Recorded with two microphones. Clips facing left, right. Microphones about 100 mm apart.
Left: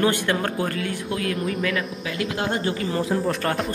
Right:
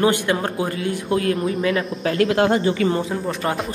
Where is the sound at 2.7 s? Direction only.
Centre (ahead or behind).